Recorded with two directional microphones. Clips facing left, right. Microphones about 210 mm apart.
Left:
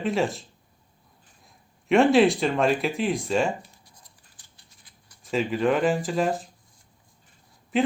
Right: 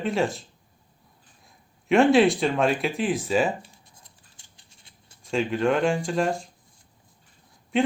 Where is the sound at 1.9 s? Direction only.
Centre (ahead or behind).